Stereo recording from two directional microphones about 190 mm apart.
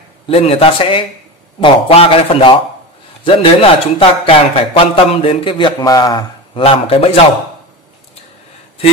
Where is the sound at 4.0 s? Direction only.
30° left (ahead or behind).